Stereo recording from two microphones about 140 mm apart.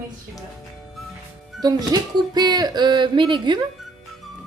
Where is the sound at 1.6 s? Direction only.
30° right (ahead or behind).